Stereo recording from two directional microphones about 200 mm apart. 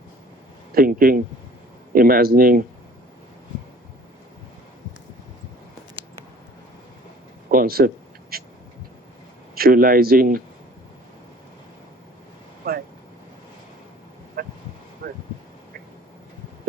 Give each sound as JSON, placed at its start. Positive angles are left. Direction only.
{"t": 0.7, "sound": "speech", "side_deg": -45}
{"t": 7.5, "sound": "speech", "side_deg": -45}
{"t": 8.3, "sound": "a sound", "side_deg": -50}
{"t": 9.6, "sound": "speech", "side_deg": -45}
{"t": 12.7, "sound": "speech", "side_deg": -50}
{"t": 14.4, "sound": "a sound", "side_deg": -45}